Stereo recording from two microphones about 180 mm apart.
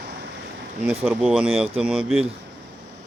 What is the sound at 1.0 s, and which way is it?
Speech, 5° right (ahead or behind).